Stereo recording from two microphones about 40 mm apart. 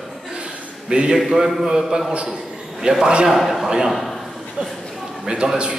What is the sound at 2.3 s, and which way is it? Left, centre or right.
Basketball bounce, centre.